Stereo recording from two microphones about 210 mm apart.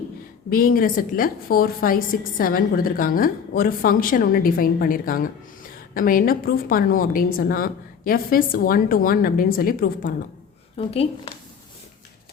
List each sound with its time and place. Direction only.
0.5 s a woman's voice: 40° left (ahead or behind)
10.8 s a woman's voice: 30° left (ahead or behind)